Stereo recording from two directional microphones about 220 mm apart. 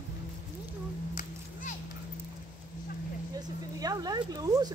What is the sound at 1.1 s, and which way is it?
Music, 35° left (ahead or behind).